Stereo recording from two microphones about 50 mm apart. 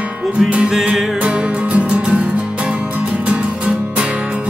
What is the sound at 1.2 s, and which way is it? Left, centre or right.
Music, right.